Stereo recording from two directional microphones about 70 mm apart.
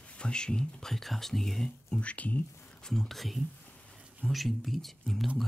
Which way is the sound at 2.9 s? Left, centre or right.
Centre.